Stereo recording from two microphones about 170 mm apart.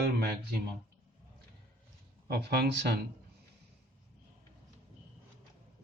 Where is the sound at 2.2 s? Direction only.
70° right (ahead or behind).